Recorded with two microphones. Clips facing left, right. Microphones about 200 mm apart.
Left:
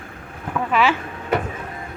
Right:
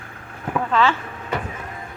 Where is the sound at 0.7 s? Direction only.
10° left (ahead or behind).